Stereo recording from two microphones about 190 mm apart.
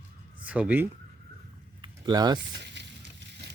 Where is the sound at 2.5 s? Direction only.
65° right (ahead or behind).